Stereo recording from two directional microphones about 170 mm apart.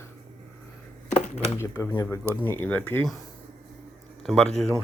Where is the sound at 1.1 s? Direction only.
40° left (ahead or behind).